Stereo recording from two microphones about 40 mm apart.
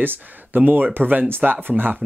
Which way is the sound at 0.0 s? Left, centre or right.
Right.